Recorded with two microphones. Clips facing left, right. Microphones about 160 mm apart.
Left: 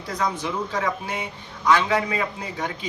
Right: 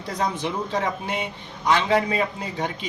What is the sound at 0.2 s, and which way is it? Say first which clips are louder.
A man's voice: even; 30° right (ahead or behind).